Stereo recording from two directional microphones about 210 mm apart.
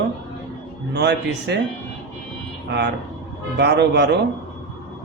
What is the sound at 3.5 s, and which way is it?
Speech, 55° right (ahead or behind).